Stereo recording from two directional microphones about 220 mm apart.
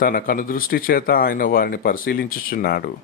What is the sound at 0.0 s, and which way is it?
Speech, 40° left (ahead or behind).